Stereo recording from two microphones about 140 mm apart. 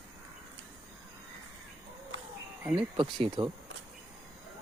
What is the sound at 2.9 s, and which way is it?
Speech, 30° right (ahead or behind).